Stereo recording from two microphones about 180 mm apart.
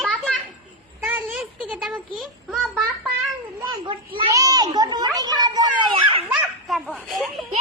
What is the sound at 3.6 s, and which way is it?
A child's voice, 25° right (ahead or behind).